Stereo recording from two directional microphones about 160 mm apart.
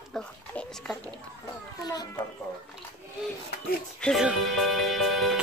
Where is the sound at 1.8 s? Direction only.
25° left (ahead or behind).